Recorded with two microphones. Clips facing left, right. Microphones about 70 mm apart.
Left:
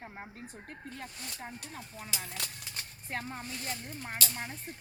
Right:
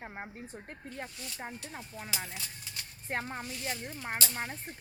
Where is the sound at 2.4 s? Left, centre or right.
Left.